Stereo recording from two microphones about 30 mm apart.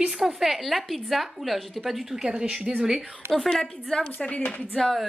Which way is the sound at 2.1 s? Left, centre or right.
Right.